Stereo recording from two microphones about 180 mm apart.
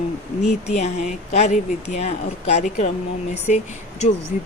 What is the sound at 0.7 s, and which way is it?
Speech, 40° left (ahead or behind).